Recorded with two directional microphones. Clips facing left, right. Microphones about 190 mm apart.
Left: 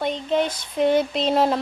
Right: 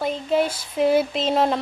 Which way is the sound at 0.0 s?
5° right (ahead or behind).